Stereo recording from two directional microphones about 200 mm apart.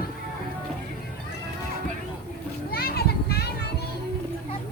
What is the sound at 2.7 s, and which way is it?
Children playing, 50° left (ahead or behind).